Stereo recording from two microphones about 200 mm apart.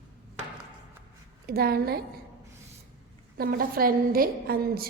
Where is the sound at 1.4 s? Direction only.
50° right (ahead or behind).